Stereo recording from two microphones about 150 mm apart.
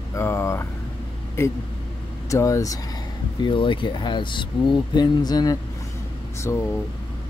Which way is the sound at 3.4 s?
35° left (ahead or behind).